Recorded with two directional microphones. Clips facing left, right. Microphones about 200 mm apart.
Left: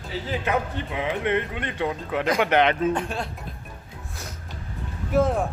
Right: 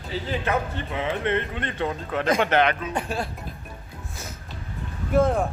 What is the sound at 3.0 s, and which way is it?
Speech, 5° right (ahead or behind).